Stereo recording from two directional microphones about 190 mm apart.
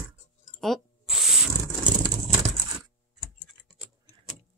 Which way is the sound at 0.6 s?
Centre (ahead or behind).